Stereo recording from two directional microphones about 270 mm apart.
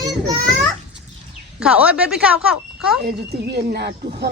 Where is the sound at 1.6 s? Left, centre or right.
Centre.